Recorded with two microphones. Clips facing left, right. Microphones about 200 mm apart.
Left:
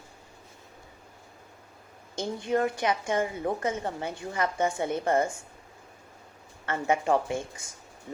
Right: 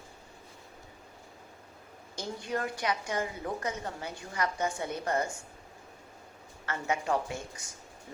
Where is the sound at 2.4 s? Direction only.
25° left (ahead or behind).